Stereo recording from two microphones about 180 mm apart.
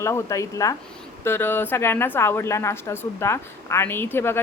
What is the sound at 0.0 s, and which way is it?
Speech, 15° left (ahead or behind).